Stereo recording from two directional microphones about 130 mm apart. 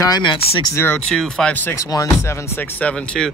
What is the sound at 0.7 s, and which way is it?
Speech, 15° left (ahead or behind).